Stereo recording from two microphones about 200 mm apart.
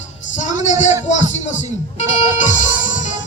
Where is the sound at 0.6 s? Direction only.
35° left (ahead or behind).